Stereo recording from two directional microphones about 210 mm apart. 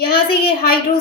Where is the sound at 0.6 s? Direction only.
45° left (ahead or behind).